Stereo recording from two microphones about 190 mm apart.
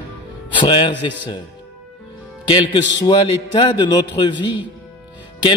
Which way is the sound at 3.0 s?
25° left (ahead or behind).